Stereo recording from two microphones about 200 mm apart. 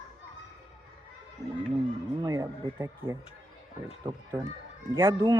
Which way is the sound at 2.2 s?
15° right (ahead or behind).